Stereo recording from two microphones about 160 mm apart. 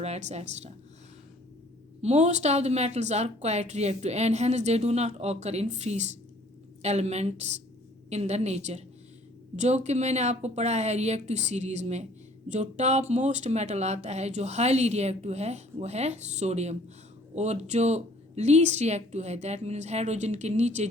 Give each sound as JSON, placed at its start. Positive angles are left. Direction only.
{"t": 0.0, "sound": "speech", "side_deg": -45}
{"t": 2.0, "sound": "speech", "side_deg": -45}